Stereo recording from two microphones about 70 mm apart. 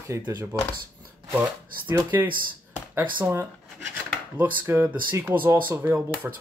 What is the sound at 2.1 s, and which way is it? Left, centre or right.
Speech, right.